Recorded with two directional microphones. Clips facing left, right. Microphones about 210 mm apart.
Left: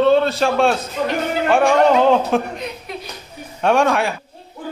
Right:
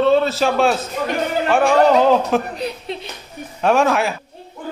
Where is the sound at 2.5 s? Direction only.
30° right (ahead or behind).